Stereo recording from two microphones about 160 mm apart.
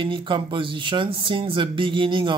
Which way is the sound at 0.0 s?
30° right (ahead or behind).